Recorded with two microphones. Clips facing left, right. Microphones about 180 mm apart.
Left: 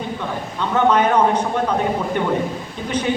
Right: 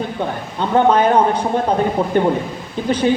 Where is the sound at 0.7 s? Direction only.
30° right (ahead or behind).